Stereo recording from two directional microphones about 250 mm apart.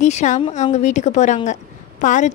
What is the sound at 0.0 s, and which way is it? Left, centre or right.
A woman's voice, left.